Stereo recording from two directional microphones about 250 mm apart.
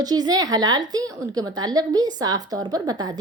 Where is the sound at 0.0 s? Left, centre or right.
Centre.